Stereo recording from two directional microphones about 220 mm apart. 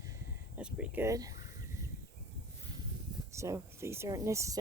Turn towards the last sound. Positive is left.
turn(degrees=-15)  # may be behind; listen again after turning